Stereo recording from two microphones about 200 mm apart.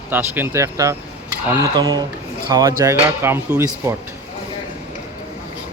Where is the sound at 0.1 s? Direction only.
10° right (ahead or behind).